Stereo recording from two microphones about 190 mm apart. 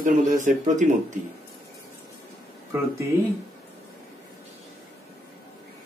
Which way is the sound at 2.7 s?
15° right (ahead or behind).